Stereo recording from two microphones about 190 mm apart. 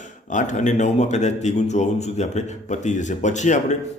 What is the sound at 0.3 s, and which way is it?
Speech, 40° left (ahead or behind).